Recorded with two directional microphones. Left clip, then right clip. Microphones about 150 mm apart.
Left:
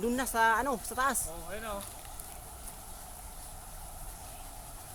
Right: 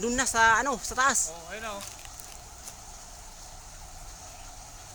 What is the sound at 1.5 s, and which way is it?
Speech, 20° left (ahead or behind).